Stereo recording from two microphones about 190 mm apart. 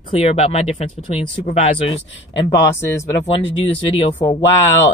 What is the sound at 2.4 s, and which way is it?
Speech, 25° left (ahead or behind).